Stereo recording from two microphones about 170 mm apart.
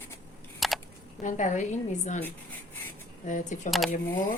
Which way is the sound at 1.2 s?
45° left (ahead or behind).